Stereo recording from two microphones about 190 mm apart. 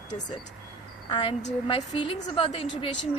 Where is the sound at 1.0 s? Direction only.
25° left (ahead or behind).